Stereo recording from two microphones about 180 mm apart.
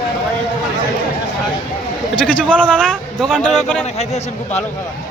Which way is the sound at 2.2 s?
5° left (ahead or behind).